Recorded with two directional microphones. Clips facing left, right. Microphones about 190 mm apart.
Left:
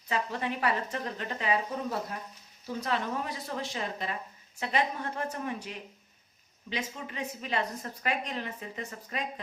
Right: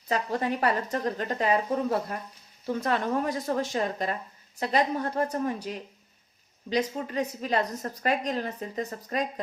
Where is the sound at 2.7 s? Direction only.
50° right (ahead or behind).